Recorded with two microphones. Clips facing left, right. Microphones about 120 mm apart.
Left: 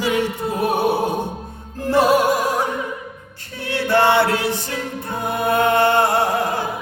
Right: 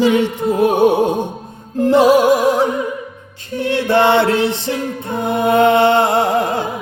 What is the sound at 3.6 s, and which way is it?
Chant, 20° right (ahead or behind).